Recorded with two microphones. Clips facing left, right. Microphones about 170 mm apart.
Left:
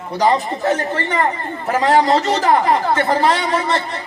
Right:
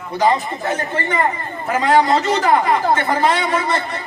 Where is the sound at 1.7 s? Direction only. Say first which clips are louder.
Left 1 dB; 40° left (ahead or behind).